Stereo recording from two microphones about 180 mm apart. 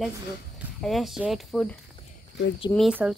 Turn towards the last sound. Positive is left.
turn(degrees=-5)  # may be behind; listen again after turning